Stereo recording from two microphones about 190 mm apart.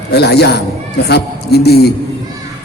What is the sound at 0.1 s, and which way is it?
A man's voice, 60° left (ahead or behind).